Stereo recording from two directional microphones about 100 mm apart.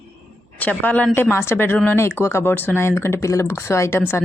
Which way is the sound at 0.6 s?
15° left (ahead or behind).